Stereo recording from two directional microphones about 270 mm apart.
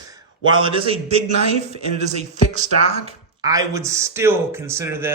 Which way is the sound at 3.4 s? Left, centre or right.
Centre.